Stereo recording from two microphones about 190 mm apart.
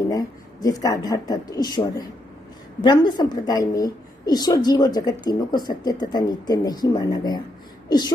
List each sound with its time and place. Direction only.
0.1 s a woman's voice: 20° left (ahead or behind)